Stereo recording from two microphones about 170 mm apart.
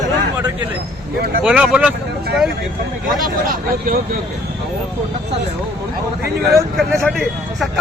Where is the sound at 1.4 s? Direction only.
5° right (ahead or behind).